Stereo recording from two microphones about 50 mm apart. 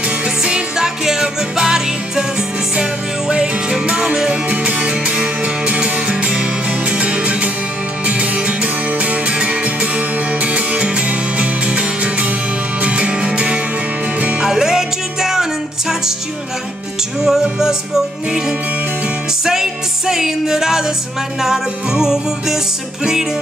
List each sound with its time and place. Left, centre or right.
0.5 s music: centre
17.2 s music: centre
19.4 s music: centre